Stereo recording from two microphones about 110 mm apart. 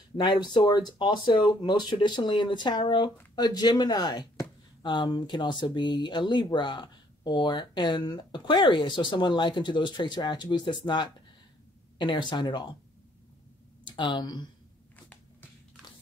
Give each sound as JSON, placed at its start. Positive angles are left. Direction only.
{"t": 0.2, "sound": "speech", "side_deg": 40}
{"t": 13.8, "sound": "speech", "side_deg": 45}